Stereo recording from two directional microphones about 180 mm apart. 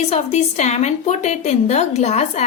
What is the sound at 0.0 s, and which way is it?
A woman's voice, 35° left (ahead or behind).